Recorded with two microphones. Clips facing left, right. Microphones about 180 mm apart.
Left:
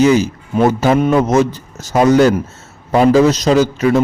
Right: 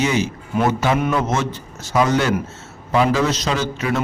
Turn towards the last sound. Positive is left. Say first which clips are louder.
# left 9 dB
turn(degrees=40)  # may be behind; listen again after turning